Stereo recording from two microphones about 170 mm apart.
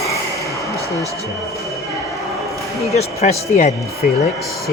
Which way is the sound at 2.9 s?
40° left (ahead or behind).